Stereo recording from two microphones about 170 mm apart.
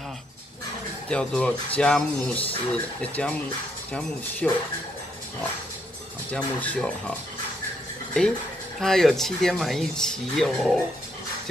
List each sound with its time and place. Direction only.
1.0 s speech: 5° left (ahead or behind)
4.4 s speech: 5° left (ahead or behind)
6.3 s speech: 5° left (ahead or behind)
8.8 s speech: centre (ahead or behind)